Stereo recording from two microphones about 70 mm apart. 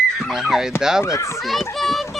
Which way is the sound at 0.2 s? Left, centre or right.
Centre.